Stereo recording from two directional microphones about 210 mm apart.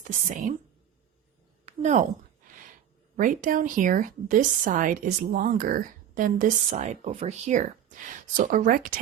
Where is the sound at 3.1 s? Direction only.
40° right (ahead or behind).